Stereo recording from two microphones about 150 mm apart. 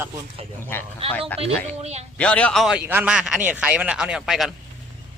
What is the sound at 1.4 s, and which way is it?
Speech, 45° right (ahead or behind).